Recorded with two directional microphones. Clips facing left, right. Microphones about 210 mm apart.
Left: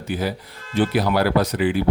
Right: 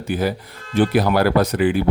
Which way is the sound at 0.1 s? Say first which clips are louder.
Right 3 dB; 50° right (ahead or behind).